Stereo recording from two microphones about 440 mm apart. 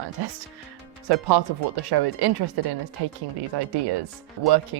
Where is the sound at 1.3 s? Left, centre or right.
Right.